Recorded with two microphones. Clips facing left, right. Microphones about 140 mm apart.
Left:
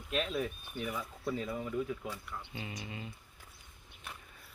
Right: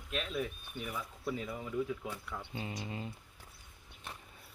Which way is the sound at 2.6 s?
35° right (ahead or behind).